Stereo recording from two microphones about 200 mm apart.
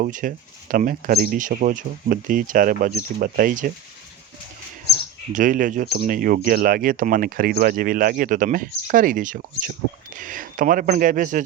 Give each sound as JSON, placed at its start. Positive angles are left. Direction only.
{"t": 0.0, "sound": "speech", "side_deg": -40}
{"t": 5.3, "sound": "speech", "side_deg": -40}